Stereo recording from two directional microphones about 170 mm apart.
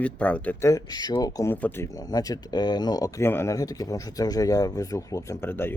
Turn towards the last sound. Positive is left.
turn(degrees=15)  # may be behind; listen again after turning